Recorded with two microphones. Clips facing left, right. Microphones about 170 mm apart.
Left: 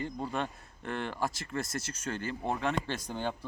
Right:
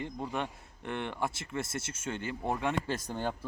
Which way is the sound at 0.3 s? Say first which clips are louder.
Left 1 dB; 10° right (ahead or behind).